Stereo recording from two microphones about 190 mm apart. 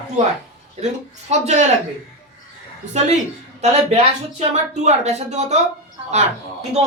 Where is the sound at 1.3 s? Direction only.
35° right (ahead or behind).